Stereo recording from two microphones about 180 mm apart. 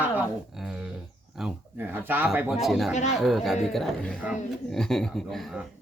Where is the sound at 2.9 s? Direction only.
40° left (ahead or behind).